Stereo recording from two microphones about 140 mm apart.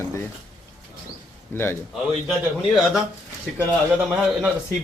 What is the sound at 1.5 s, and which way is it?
Speech, 15° left (ahead or behind).